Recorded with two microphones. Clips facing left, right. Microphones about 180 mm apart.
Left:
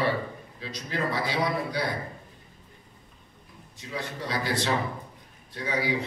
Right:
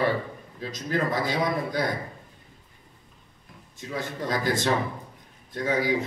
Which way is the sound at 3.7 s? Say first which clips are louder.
Right 3 dB; 45° right (ahead or behind).